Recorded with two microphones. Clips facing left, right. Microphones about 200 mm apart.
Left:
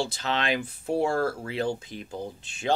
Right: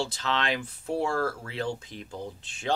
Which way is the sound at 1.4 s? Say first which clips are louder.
Left 4 dB; 10° left (ahead or behind).